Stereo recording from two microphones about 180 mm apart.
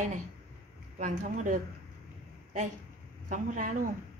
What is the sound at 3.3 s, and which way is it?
Speech, 45° right (ahead or behind).